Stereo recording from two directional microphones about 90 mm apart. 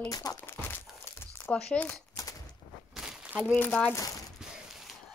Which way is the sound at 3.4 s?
20° left (ahead or behind).